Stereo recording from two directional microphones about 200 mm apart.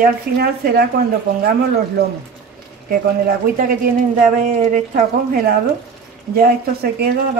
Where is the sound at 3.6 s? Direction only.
40° right (ahead or behind).